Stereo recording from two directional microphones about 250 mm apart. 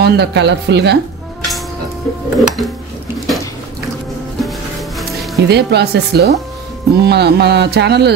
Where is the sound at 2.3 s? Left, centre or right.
Centre.